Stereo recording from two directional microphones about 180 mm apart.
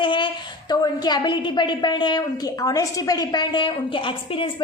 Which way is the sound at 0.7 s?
20° left (ahead or behind).